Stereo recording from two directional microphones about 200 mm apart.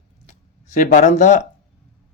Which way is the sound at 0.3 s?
40° left (ahead or behind).